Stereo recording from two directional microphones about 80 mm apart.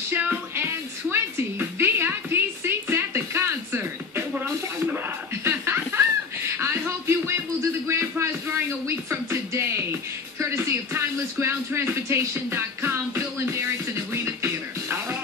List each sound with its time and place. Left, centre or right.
0.1 s music: right
4.8 s laughter: right
10.4 s a sound: right